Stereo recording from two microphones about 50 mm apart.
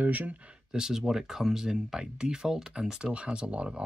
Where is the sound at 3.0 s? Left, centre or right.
Right.